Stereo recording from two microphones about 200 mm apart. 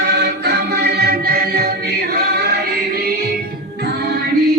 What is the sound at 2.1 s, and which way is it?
Choir, 55° right (ahead or behind).